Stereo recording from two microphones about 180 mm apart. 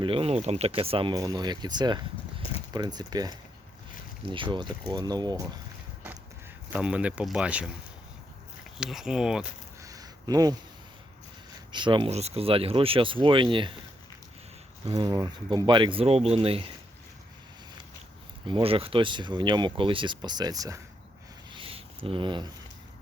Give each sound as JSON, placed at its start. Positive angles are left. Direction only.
{"t": 0.0, "sound": "speech", "side_deg": -30}
{"t": 6.7, "sound": "speech", "side_deg": -5}
{"t": 8.8, "sound": "speech", "side_deg": -5}
{"t": 9.8, "sound": "a sound", "side_deg": -20}
{"t": 11.7, "sound": "speech", "side_deg": -25}
{"t": 14.8, "sound": "speech", "side_deg": -25}
{"t": 18.4, "sound": "speech", "side_deg": -30}
{"t": 21.5, "sound": "a sound", "side_deg": -30}